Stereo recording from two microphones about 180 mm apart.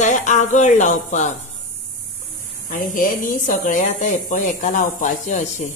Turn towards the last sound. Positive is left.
turn(degrees=45)  # may be behind; listen again after turning